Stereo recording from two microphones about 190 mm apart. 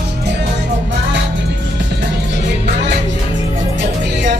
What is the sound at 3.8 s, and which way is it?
Music, 60° right (ahead or behind).